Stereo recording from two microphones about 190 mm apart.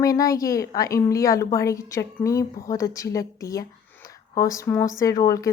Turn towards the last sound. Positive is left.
turn(degrees=20)  # may be behind; listen again after turning